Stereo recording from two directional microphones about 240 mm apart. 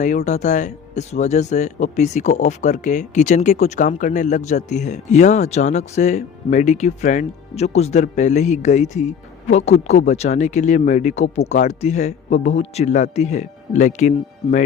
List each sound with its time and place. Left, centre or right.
0.0 s speech: left